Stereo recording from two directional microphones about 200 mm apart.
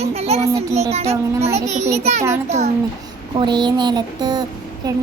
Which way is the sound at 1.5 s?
35° right (ahead or behind).